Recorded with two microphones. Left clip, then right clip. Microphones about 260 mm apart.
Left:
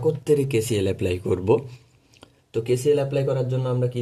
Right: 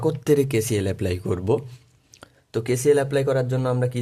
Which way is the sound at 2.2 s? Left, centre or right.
Right.